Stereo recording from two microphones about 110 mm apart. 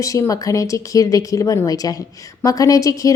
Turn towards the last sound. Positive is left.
turn(degrees=30)  # may be behind; listen again after turning